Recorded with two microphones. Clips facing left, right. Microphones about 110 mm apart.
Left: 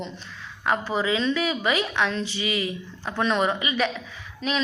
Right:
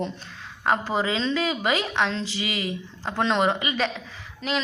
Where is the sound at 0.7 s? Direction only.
40° right (ahead or behind).